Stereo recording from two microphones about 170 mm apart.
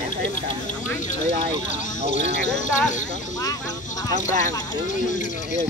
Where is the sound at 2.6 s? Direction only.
45° left (ahead or behind).